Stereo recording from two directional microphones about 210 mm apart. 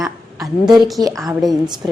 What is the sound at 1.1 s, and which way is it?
Speech, centre (ahead or behind).